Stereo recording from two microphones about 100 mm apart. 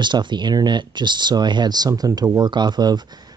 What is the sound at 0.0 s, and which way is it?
Speech, 50° right (ahead or behind).